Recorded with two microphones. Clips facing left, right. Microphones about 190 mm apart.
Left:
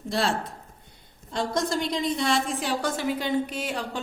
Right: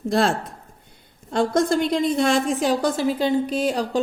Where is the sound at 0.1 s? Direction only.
50° right (ahead or behind).